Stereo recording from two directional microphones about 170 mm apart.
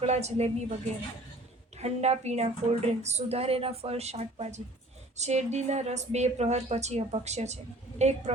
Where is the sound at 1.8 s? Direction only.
40° right (ahead or behind).